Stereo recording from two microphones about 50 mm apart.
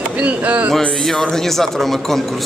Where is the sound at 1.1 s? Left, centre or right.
Centre.